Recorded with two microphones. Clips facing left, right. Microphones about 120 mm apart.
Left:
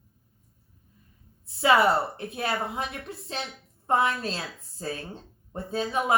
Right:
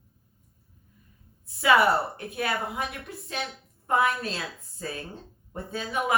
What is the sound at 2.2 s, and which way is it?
Speech, 25° left (ahead or behind).